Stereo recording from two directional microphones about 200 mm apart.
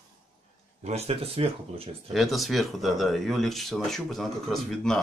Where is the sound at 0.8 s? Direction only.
30° right (ahead or behind).